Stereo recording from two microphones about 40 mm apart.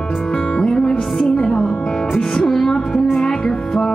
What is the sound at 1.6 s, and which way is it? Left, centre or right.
Music, centre.